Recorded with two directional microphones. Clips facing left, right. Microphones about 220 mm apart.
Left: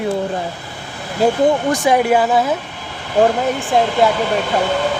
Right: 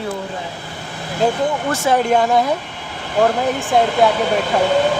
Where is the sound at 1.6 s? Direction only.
15° left (ahead or behind).